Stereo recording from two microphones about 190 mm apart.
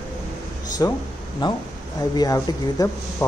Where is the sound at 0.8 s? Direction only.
20° left (ahead or behind).